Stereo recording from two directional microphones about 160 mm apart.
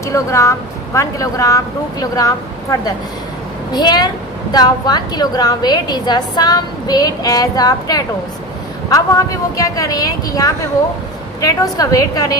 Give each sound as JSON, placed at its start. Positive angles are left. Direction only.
{"t": 0.0, "sound": "a woman's voice", "side_deg": 20}